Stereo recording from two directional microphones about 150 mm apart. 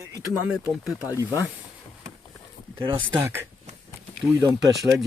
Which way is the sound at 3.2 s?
15° right (ahead or behind).